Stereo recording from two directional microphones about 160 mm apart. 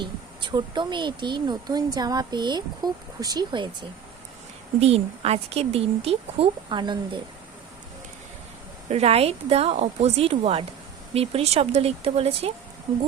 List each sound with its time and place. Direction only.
0.0 s speech: 30° right (ahead or behind)
4.8 s speech: 40° right (ahead or behind)
8.9 s speech: 40° right (ahead or behind)